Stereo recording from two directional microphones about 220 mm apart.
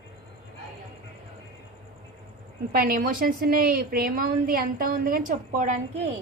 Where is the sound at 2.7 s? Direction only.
40° right (ahead or behind).